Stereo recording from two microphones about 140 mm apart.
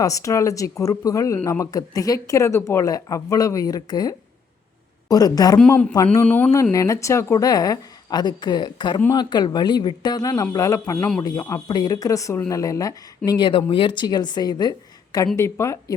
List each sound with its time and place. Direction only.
0.0 s speech: 25° left (ahead or behind)
5.5 s speech: 10° left (ahead or behind)
6.5 s speech: 25° left (ahead or behind)